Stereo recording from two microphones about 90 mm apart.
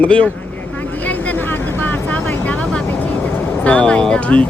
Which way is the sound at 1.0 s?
15° left (ahead or behind).